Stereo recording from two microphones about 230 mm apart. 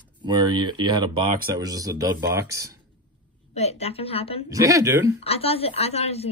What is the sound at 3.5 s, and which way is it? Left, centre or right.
Speech, left.